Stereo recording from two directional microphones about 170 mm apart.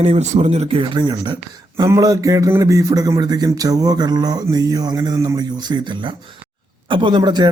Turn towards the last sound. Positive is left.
turn(degrees=-25)  # may be behind; listen again after turning